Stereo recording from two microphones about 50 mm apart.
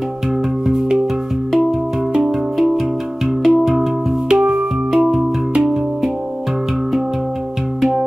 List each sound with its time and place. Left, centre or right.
2.1 s music: right
3.4 s music: centre